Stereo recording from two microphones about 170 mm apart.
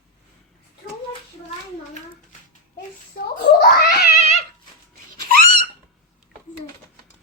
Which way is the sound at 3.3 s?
70° left (ahead or behind).